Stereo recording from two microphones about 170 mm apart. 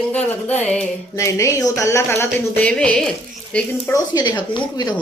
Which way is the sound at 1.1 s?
20° left (ahead or behind).